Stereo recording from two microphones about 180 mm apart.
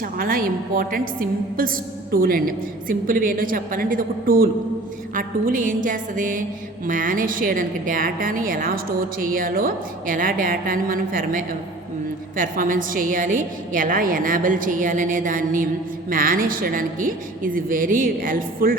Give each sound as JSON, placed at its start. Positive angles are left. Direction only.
{"t": 0.0, "sound": "a woman's voice", "side_deg": -50}